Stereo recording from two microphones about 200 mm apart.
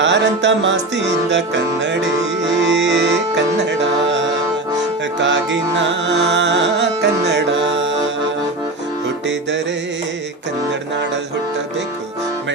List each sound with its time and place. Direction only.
0.0 s music: 65° right (ahead or behind)
5.2 s music: 65° right (ahead or behind)